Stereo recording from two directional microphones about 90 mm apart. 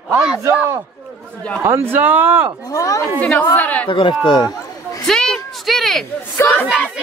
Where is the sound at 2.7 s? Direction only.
35° left (ahead or behind).